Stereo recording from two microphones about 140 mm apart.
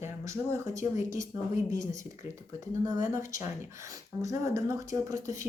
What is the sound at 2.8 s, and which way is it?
A woman's voice, 25° right (ahead or behind).